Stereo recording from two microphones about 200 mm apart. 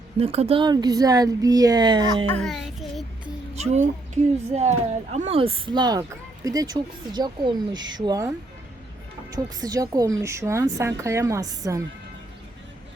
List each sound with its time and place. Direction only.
0.2 s speech: 30° right (ahead or behind)
2.3 s a child's voice: 5° left (ahead or behind)
3.5 s a child's voice: 35° right (ahead or behind)
9.3 s a woman's voice: 20° right (ahead or behind)